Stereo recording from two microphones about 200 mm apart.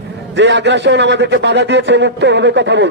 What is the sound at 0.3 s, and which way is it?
A man's voice, 60° right (ahead or behind).